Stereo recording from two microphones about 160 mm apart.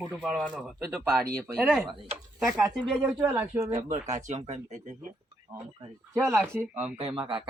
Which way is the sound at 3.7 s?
45° right (ahead or behind).